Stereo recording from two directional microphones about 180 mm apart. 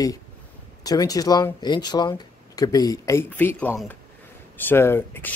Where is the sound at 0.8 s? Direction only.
20° left (ahead or behind).